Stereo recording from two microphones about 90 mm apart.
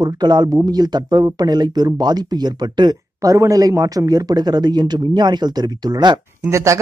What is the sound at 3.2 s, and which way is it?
Speech, 40° right (ahead or behind).